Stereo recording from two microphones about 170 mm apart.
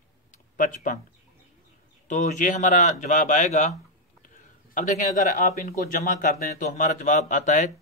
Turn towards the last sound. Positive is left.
turn(degrees=45)  # may be behind; listen again after turning